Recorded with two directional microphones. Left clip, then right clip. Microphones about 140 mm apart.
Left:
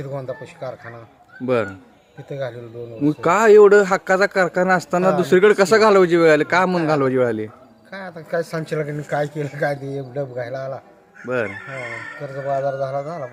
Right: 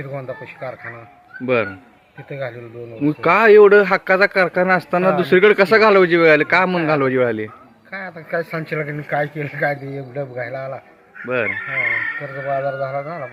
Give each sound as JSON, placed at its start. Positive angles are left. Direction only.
{"t": 0.0, "sound": "a man's voice", "side_deg": 15}